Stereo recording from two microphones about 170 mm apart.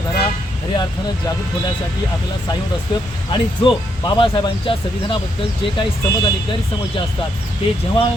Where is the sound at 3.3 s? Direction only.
25° left (ahead or behind).